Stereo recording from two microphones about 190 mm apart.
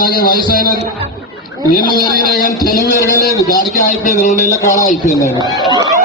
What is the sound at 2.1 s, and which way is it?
Speech, 50° left (ahead or behind).